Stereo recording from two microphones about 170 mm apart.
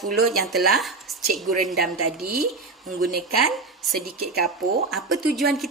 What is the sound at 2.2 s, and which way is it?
Speech, 60° right (ahead or behind).